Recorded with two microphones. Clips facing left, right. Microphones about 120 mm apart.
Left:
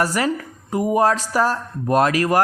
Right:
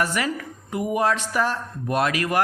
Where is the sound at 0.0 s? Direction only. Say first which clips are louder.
Left 4 dB; 35° left (ahead or behind).